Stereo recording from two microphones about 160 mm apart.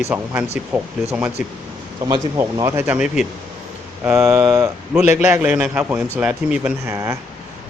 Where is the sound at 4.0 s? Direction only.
15° right (ahead or behind).